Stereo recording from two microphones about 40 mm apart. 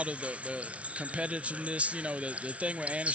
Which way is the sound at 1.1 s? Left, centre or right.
Right.